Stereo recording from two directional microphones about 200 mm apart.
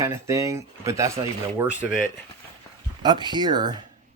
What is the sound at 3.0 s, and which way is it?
Speech, 20° right (ahead or behind).